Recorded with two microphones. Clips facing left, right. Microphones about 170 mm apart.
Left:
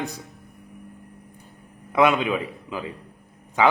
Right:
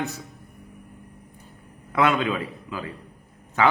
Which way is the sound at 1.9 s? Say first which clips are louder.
Left 2 dB; 15° left (ahead or behind).